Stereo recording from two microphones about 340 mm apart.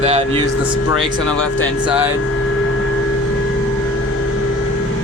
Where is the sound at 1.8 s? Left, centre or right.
Centre.